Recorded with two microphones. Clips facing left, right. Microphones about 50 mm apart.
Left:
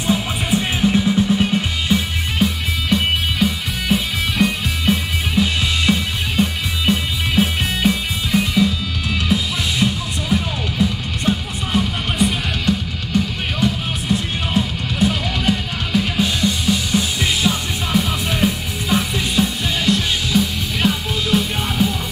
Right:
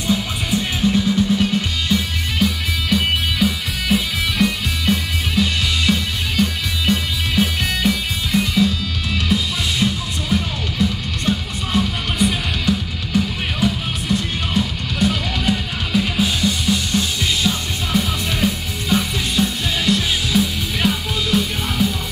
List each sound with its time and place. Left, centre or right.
0.0 s music: centre
3.3 s music: centre
17.2 s music: centre